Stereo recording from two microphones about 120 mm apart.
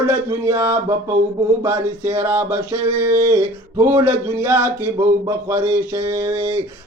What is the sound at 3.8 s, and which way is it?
Speech, 20° right (ahead or behind).